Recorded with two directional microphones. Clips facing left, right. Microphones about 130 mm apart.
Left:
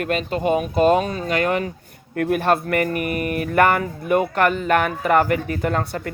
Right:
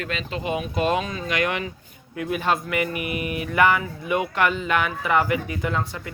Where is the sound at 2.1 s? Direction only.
55° left (ahead or behind).